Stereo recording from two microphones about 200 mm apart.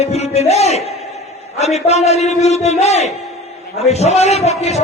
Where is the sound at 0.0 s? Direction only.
30° left (ahead or behind).